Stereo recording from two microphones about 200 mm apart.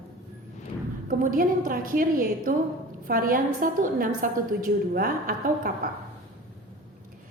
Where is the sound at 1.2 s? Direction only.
45° right (ahead or behind).